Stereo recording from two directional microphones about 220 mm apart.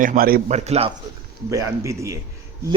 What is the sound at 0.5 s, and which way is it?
Speech, 30° right (ahead or behind).